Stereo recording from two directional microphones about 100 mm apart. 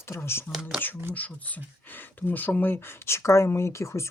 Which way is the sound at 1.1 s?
15° left (ahead or behind).